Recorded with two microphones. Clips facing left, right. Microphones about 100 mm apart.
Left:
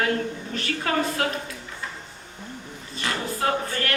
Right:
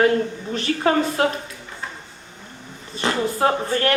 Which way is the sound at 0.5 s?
30° right (ahead or behind).